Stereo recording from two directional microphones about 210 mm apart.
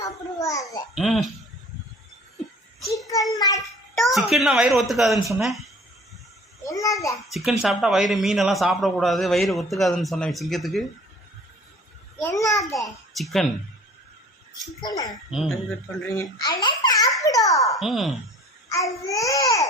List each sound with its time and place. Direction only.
0.0 s a child's voice: 15° left (ahead or behind)
0.9 s a man's voice: centre (ahead or behind)
3.3 s speech: 20° left (ahead or behind)
3.9 s a man's voice: centre (ahead or behind)
6.7 s speech: 15° left (ahead or behind)
7.3 s a man's voice: centre (ahead or behind)
12.1 s speech: 15° left (ahead or behind)
13.1 s a man's voice: centre (ahead or behind)
14.8 s speech: 20° left (ahead or behind)
15.3 s a man's voice: centre (ahead or behind)
16.0 s speech: 15° left (ahead or behind)
17.7 s a man's voice: centre (ahead or behind)
18.7 s speech: 15° left (ahead or behind)